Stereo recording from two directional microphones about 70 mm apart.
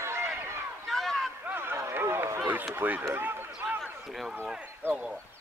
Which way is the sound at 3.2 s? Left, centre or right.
Right.